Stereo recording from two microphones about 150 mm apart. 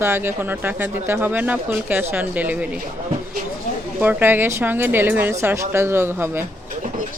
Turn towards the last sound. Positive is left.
turn(degrees=-15)  # may be behind; listen again after turning